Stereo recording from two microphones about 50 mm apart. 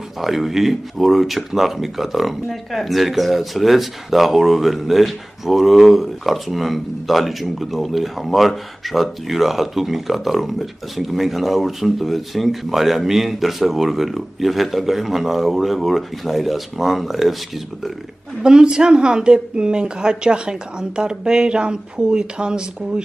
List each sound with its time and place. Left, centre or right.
0.2 s speech: centre
18.4 s speech: centre